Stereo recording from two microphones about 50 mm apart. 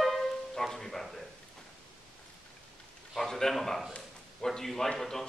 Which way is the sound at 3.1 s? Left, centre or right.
Centre.